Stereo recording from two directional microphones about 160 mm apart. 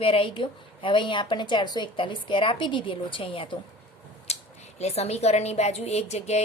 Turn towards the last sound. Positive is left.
turn(degrees=45)  # may be behind; listen again after turning